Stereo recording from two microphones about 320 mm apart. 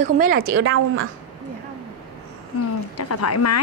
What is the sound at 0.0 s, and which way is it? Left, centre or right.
Speech, right.